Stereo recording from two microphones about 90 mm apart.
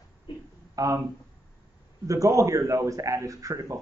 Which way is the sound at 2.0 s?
40° right (ahead or behind).